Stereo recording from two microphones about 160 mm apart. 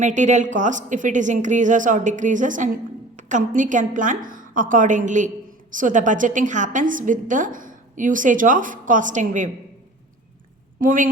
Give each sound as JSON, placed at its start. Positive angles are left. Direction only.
{"t": 0.0, "sound": "a woman's voice", "side_deg": -50}
{"t": 10.8, "sound": "a woman's voice", "side_deg": -55}